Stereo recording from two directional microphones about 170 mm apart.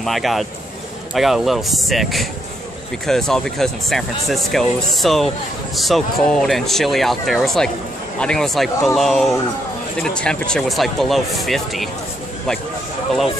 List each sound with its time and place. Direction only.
0.0 s speech: centre (ahead or behind)